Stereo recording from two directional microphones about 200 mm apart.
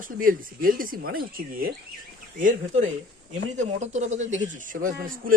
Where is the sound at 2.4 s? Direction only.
35° right (ahead or behind).